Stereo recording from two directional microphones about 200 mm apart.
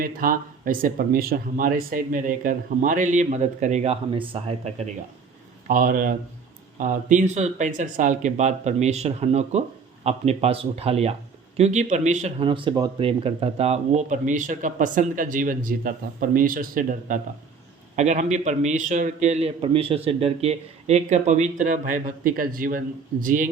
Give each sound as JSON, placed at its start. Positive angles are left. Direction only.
{"t": 0.0, "sound": "speech", "side_deg": -45}
{"t": 5.6, "sound": "speech", "side_deg": -45}